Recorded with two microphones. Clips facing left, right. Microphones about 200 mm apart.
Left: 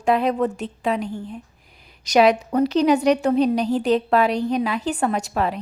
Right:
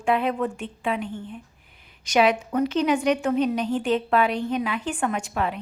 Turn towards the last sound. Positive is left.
turn(degrees=35)  # may be behind; listen again after turning